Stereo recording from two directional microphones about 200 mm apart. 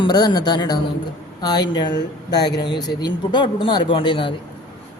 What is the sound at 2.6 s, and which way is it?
A man's voice, 20° left (ahead or behind).